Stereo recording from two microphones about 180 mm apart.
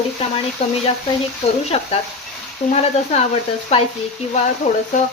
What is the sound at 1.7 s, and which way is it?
Speech, 30° left (ahead or behind).